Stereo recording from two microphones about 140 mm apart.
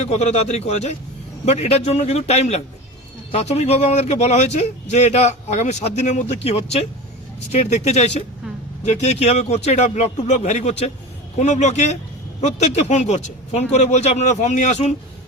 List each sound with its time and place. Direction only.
0.0 s a man's voice: 50° left (ahead or behind)